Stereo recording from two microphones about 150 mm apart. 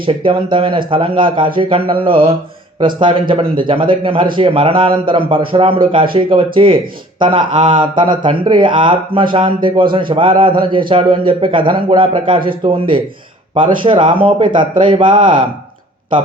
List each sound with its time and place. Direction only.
0.0 s a man's voice: 35° right (ahead or behind)